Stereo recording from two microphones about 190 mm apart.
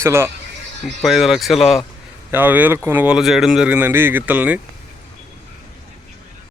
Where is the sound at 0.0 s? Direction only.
15° right (ahead or behind).